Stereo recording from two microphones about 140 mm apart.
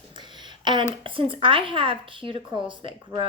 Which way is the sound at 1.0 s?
40° right (ahead or behind).